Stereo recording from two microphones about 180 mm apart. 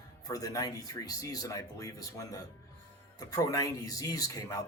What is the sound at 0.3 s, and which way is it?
Speech, 20° left (ahead or behind).